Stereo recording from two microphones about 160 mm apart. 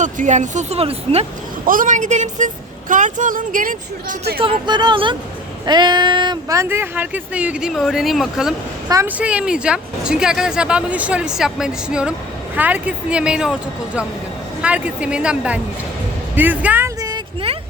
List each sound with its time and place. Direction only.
0.0 s speech: 50° right (ahead or behind)
1.6 s speech: 60° right (ahead or behind)
4.4 s speech: 35° right (ahead or behind); by 8.5 s centre (ahead or behind)
8.9 s speech: 15° right (ahead or behind)